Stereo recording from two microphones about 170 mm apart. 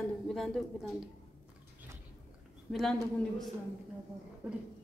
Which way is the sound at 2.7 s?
Centre (ahead or behind).